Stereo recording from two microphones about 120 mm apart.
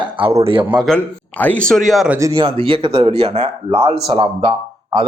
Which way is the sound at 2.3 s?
50° right (ahead or behind).